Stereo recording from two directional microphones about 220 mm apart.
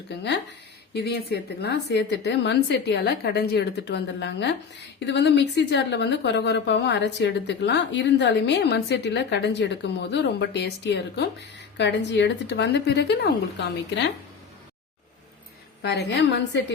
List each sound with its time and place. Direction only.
0.9 s a woman's voice: 45° left (ahead or behind)
15.8 s a woman's voice: 50° left (ahead or behind)